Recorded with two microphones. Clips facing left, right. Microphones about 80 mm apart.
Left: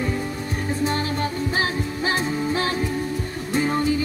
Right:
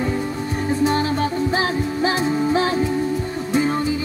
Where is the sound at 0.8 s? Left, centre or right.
Right.